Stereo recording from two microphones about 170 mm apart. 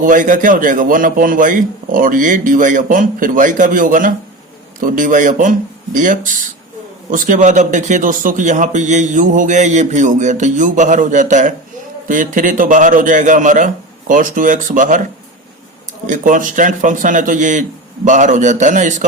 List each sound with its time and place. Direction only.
0.0 s speech: 50° right (ahead or behind)
16.0 s speech: 50° right (ahead or behind)